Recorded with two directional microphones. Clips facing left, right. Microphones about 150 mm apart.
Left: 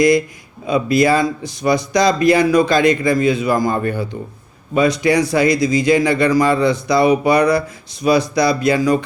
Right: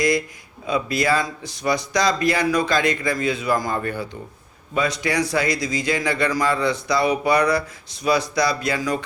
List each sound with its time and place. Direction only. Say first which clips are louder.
0.7 s speech: left 7 dB; 15° left (ahead or behind)